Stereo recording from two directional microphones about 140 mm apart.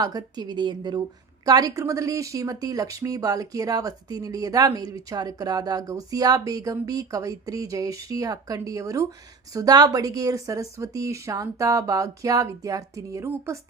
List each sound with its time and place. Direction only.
0.0 s speech: 25° right (ahead or behind)